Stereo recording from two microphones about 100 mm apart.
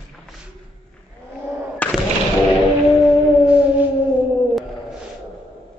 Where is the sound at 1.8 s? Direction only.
15° left (ahead or behind).